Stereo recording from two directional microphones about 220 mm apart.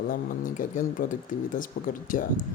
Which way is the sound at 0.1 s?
40° left (ahead or behind).